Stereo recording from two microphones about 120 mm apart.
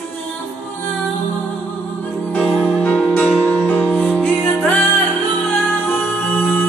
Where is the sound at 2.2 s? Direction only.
15° left (ahead or behind).